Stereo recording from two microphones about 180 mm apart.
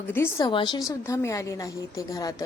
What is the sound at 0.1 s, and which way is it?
A woman's voice, 15° left (ahead or behind).